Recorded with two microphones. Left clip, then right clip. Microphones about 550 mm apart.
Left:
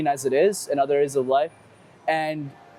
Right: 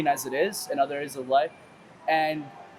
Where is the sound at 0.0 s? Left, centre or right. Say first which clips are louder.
Left 5 dB; left.